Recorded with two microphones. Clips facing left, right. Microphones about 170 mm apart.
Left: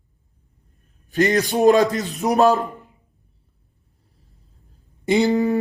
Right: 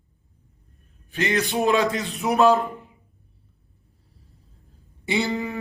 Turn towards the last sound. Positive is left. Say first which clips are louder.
# left 8 dB
turn(degrees=40)  # may be behind; listen again after turning